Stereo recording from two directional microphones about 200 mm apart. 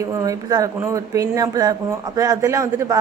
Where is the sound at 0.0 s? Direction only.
15° right (ahead or behind).